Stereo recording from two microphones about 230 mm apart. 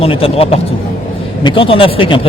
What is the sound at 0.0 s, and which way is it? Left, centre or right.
Speech, left.